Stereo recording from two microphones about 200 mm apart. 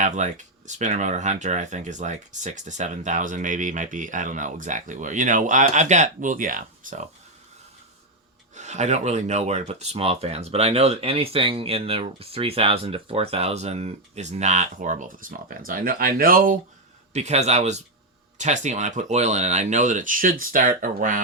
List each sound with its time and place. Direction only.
0.0 s speech: 40° right (ahead or behind)
8.5 s speech: 35° right (ahead or behind)